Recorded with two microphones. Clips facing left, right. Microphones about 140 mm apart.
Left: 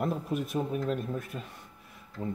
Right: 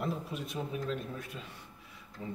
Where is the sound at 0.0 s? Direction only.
50° left (ahead or behind).